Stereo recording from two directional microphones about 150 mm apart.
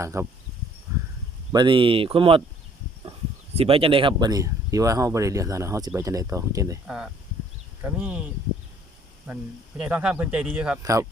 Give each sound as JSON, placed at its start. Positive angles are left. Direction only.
{"t": 0.0, "sound": "speech", "side_deg": -20}
{"t": 0.9, "sound": "a sound", "side_deg": -20}
{"t": 1.5, "sound": "speech", "side_deg": -35}
{"t": 3.5, "sound": "speech", "side_deg": -40}
{"t": 6.8, "sound": "speech", "side_deg": -5}
{"t": 9.2, "sound": "speech", "side_deg": -5}